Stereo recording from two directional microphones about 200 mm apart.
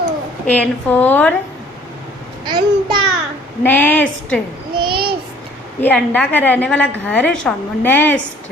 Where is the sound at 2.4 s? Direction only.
25° right (ahead or behind).